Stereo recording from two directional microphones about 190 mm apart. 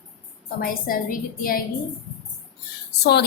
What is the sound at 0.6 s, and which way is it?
A woman's voice, 50° left (ahead or behind).